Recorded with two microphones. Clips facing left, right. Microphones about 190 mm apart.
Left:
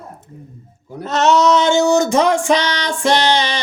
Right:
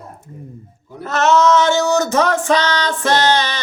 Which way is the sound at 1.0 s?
20° left (ahead or behind).